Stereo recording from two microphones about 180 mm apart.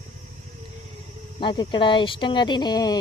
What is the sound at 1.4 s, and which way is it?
Speech, 25° left (ahead or behind).